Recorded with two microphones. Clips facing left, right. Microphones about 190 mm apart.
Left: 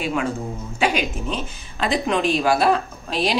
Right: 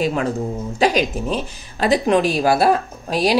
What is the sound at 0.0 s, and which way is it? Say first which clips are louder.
Speech: right 4 dB; 40° right (ahead or behind).